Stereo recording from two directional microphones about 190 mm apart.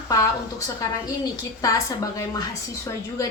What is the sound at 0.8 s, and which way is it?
A woman's voice, 20° left (ahead or behind).